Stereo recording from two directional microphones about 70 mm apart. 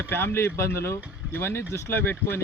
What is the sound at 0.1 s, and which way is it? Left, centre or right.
Speech, left.